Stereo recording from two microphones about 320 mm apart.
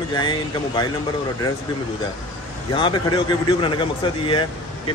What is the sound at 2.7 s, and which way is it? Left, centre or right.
A man's voice, centre.